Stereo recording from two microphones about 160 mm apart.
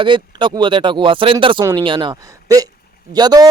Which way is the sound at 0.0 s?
30° right (ahead or behind).